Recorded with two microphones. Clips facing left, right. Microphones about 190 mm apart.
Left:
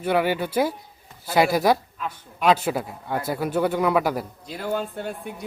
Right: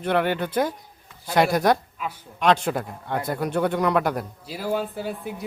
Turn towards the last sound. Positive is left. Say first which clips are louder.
# right 1 dB
turn(degrees=0)  # may be behind; listen again after turning